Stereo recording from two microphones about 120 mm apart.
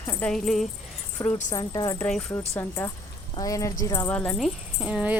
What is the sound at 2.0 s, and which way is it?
Speech, 10° left (ahead or behind).